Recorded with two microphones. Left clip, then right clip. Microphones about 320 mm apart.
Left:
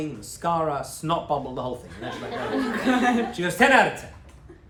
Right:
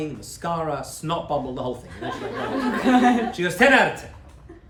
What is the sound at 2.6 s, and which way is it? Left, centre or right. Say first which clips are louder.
Speech: right 4 dB; right.